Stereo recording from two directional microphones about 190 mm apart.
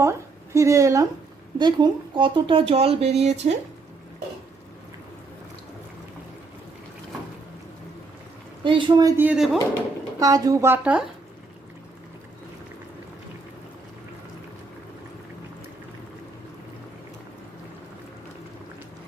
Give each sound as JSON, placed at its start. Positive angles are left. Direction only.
{"t": 0.0, "sound": "a woman's voice", "side_deg": -15}
{"t": 8.6, "sound": "speech", "side_deg": -25}
{"t": 10.2, "sound": "speech", "side_deg": -20}